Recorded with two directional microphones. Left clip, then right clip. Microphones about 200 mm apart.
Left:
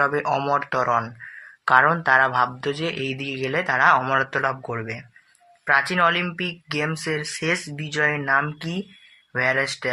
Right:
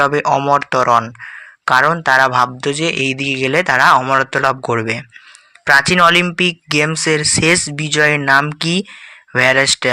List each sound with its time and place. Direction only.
0.0 s speech: 25° right (ahead or behind)